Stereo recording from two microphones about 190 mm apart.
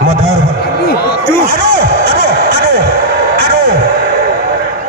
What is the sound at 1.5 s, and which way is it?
Music, 55° right (ahead or behind).